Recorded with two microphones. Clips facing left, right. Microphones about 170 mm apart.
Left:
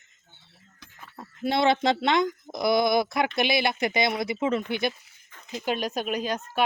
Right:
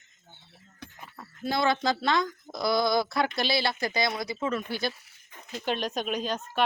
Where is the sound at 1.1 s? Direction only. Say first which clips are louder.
Left 4 dB; 25° left (ahead or behind).